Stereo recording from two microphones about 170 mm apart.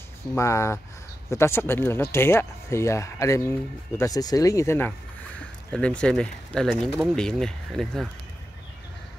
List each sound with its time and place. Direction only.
0.4 s speech: 15° left (ahead or behind)